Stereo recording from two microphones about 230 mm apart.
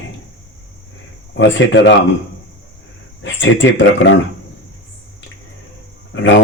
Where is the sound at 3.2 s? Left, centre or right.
Left.